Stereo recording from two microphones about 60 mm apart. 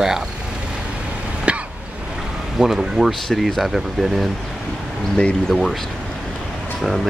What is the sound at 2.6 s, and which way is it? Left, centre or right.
Speech, centre.